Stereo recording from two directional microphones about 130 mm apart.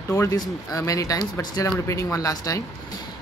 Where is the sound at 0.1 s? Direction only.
20° left (ahead or behind).